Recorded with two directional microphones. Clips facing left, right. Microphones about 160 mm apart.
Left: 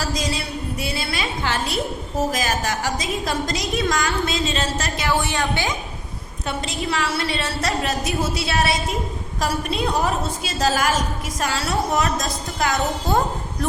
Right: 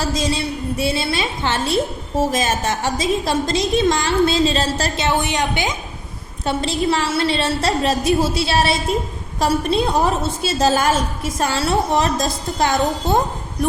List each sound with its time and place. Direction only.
0.0 s a woman's voice: 25° right (ahead or behind)
6.4 s a woman's voice: 30° right (ahead or behind)